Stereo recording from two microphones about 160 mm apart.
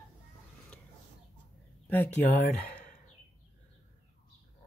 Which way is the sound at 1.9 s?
10° left (ahead or behind).